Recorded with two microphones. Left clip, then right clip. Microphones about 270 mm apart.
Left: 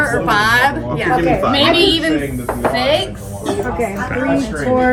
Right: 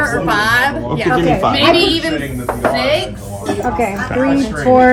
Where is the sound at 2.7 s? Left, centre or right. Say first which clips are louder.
Left 1 dB; centre.